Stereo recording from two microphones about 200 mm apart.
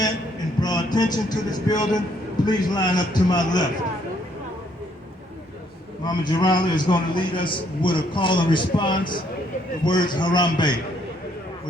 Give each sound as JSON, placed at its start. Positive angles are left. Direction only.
{"t": 0.6, "sound": "music", "side_deg": 20}
{"t": 2.5, "sound": "a man's voice", "side_deg": 20}
{"t": 6.1, "sound": "a man's voice", "side_deg": 20}